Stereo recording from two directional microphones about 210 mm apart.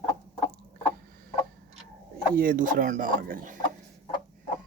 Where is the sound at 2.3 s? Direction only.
40° right (ahead or behind).